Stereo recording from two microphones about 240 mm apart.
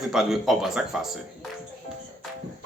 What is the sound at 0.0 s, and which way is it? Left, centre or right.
Speech, centre.